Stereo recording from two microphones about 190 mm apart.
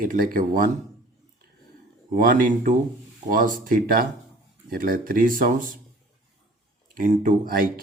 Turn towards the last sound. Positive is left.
turn(degrees=-50)  # may be behind; listen again after turning